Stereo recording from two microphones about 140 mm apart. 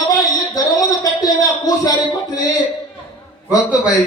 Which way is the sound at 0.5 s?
25° left (ahead or behind).